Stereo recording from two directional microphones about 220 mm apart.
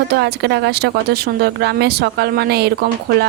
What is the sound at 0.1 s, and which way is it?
Speech, 50° right (ahead or behind).